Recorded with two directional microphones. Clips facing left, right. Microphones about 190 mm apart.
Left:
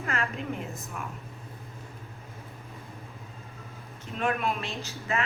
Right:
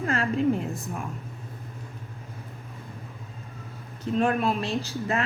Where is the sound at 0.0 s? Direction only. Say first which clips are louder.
Right 5 dB; 35° right (ahead or behind).